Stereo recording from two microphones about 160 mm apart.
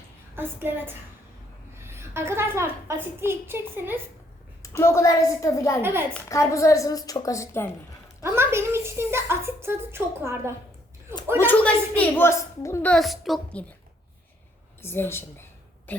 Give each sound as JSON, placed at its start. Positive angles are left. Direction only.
{"t": 0.3, "sound": "a woman's voice", "side_deg": -15}
{"t": 4.8, "sound": "a woman's voice", "side_deg": 15}
{"t": 5.8, "sound": "a woman's voice", "side_deg": -15}
{"t": 6.2, "sound": "a woman's voice", "side_deg": 20}
{"t": 8.2, "sound": "a woman's voice", "side_deg": -15}
{"t": 11.3, "sound": "a woman's voice", "side_deg": 10}
{"t": 12.9, "sound": "a woman's voice", "side_deg": 0}
{"t": 14.8, "sound": "a woman's voice", "side_deg": 15}
{"t": 15.9, "sound": "throat clearing", "side_deg": 10}